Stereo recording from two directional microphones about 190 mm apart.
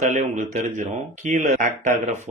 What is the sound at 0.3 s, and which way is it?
Speech, 40° right (ahead or behind).